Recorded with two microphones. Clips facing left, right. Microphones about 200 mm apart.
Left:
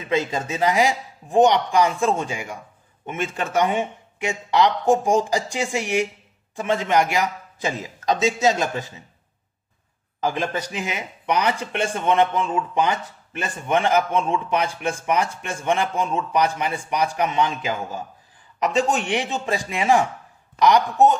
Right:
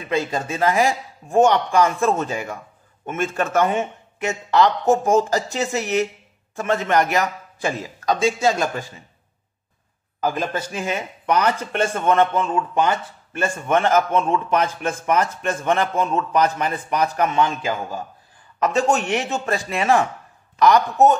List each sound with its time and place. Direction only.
0.1 s a man's voice: 20° left (ahead or behind)
10.7 s a man's voice: 15° left (ahead or behind)